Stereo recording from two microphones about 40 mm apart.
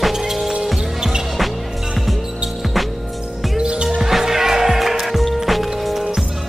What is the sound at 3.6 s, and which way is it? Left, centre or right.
Music, right.